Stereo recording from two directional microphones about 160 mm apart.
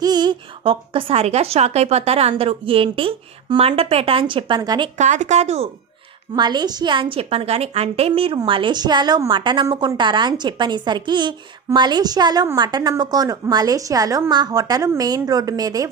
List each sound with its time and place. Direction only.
0.0 s a woman's voice: 25° right (ahead or behind)
4.9 s speech: 50° right (ahead or behind)
6.3 s a woman's voice: 25° right (ahead or behind)